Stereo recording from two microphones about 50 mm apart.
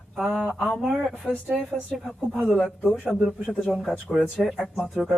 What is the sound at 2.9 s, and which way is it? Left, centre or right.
Speech, centre.